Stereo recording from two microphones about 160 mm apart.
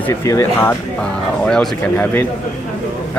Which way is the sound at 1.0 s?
5° left (ahead or behind).